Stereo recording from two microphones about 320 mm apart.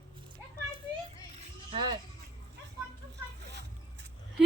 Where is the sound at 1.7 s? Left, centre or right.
Centre.